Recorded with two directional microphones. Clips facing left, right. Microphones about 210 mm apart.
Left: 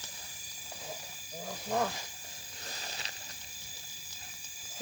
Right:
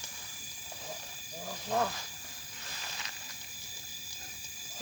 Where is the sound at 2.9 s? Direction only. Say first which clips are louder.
Even; 35° left (ahead or behind).